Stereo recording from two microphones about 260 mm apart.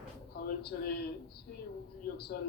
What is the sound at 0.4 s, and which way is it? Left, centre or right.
Speech, left.